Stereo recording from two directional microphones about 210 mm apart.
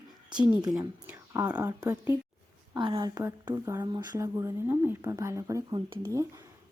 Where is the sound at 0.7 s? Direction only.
5° right (ahead or behind).